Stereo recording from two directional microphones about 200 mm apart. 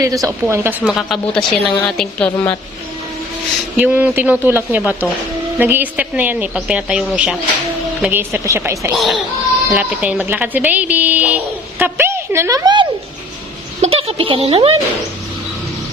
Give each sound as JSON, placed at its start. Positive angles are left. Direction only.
{"t": 0.0, "sound": "a woman's voice", "side_deg": -15}
{"t": 3.8, "sound": "a woman's voice", "side_deg": -10}
{"t": 9.0, "sound": "a woman's voice", "side_deg": 0}